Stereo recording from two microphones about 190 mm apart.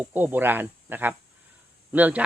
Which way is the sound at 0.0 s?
10° right (ahead or behind).